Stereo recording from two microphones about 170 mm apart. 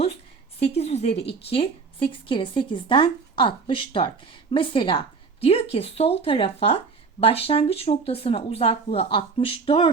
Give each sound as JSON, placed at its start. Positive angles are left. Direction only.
{"t": 0.6, "sound": "a woman's voice", "side_deg": 40}